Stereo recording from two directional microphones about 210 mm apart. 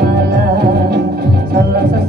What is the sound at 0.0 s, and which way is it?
Music, 50° right (ahead or behind).